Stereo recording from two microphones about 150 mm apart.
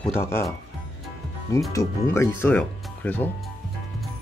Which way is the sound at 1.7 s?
20° left (ahead or behind).